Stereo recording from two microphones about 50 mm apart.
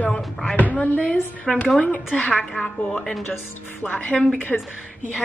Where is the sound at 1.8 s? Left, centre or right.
Left.